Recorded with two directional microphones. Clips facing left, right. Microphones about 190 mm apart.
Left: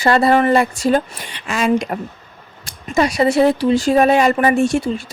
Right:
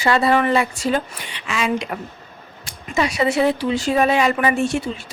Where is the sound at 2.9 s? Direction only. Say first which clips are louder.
Left 4 dB; 40° left (ahead or behind).